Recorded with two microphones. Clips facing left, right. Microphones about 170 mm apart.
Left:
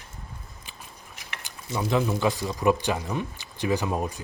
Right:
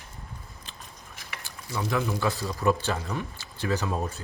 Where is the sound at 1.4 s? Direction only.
20° left (ahead or behind).